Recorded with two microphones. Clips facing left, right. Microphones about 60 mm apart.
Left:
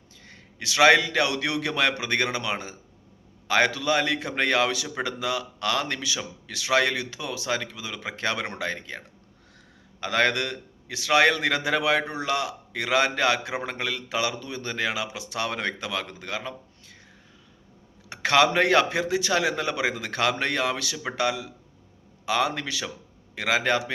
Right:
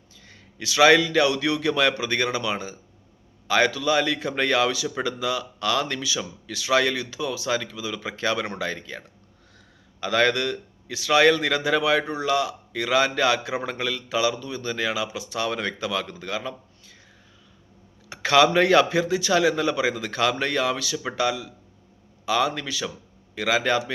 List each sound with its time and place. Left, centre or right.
0.6 s speech: left
10.0 s speech: left
18.1 s speech: left
20.9 s speech: centre
22.3 s speech: left